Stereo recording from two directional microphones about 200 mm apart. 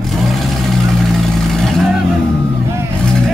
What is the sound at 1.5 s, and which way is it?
Vehicle, centre (ahead or behind).